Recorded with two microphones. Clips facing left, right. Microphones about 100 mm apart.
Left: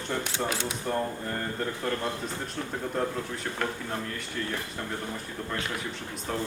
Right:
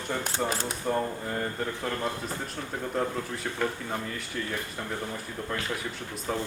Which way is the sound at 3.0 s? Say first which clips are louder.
Right 1 dB; centre (ahead or behind).